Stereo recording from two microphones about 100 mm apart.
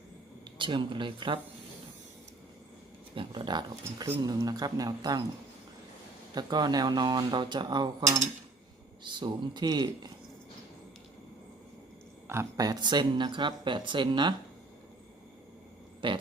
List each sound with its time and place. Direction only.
0.6 s speech: 55° right (ahead or behind)
3.2 s speech: 50° right (ahead or behind)
6.3 s speech: 45° right (ahead or behind)
9.0 s speech: 50° right (ahead or behind)
12.5 s speech: 45° right (ahead or behind)
16.0 s a sound: 55° right (ahead or behind)